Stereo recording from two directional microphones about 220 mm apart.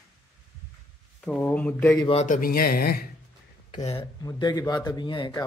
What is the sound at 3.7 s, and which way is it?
A man's voice, 25° left (ahead or behind).